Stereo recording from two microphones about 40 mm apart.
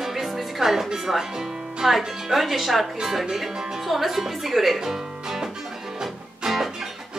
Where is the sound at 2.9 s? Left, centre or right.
Centre.